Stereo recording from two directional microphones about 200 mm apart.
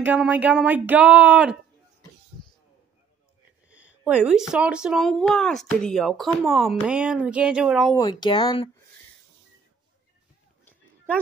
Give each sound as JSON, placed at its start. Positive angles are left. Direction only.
{"t": 0.0, "sound": "speech", "side_deg": -5}
{"t": 3.7, "sound": "speech", "side_deg": -5}
{"t": 7.9, "sound": "speech", "side_deg": 20}